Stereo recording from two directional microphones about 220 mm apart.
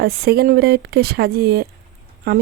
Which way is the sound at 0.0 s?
45° right (ahead or behind).